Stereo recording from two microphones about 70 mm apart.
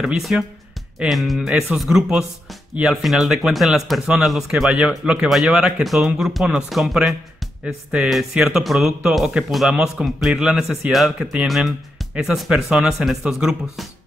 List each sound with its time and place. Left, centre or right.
0.0 s speech: centre
4.7 s speech: centre